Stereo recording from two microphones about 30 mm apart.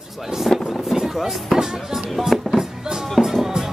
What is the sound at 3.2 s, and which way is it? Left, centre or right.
Music, centre.